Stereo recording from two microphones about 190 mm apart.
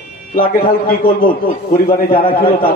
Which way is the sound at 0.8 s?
50° left (ahead or behind).